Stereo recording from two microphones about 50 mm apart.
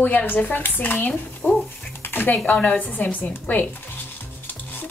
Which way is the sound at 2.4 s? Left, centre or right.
Left.